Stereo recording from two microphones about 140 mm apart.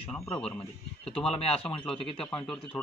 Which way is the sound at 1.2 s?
45° left (ahead or behind).